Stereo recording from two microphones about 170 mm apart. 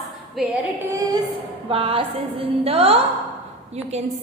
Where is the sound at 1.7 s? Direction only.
35° right (ahead or behind).